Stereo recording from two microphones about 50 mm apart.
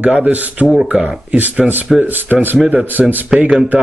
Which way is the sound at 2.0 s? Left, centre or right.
Right.